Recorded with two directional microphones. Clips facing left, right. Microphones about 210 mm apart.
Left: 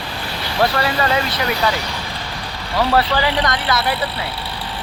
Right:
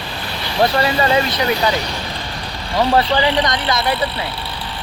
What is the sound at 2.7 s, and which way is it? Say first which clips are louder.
Speech: right 2 dB; 20° right (ahead or behind).